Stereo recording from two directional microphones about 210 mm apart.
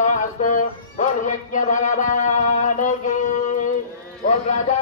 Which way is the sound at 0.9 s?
35° left (ahead or behind).